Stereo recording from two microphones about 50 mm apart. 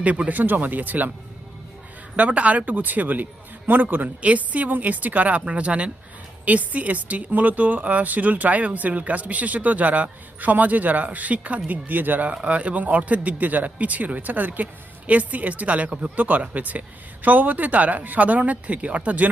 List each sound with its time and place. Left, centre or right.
0.0 s speech: right
2.1 s speech: right
12.3 s speech: right